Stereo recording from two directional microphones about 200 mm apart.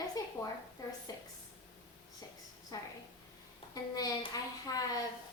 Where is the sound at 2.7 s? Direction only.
15° left (ahead or behind).